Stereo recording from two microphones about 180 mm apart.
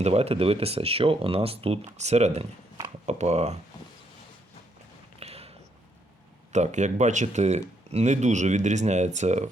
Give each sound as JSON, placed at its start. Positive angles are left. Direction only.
{"t": 0.0, "sound": "speech", "side_deg": -35}
{"t": 5.2, "sound": "a sound", "side_deg": -35}
{"t": 6.5, "sound": "speech", "side_deg": -40}